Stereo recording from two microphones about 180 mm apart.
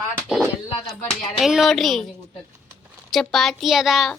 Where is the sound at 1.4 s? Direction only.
Centre (ahead or behind).